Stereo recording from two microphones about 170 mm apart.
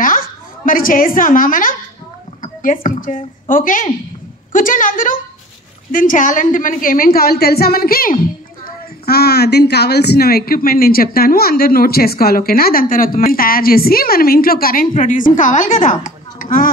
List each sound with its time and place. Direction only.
0.7 s a woman's voice: 55° left (ahead or behind)